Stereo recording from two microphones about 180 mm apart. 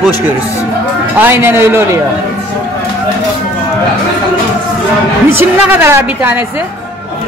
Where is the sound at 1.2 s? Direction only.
10° right (ahead or behind).